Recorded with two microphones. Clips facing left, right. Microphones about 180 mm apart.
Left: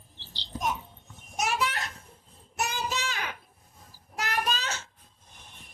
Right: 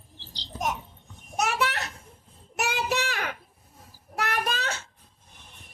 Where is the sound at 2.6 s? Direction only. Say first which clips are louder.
Right 5 dB; 65° right (ahead or behind).